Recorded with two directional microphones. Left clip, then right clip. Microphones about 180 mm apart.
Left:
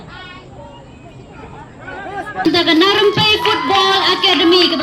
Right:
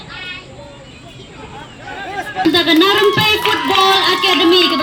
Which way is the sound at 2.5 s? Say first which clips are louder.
Even; 30° right (ahead or behind).